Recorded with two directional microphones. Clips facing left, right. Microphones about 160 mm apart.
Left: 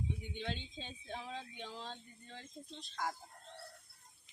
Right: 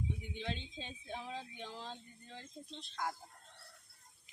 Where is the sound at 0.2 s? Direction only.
Centre (ahead or behind).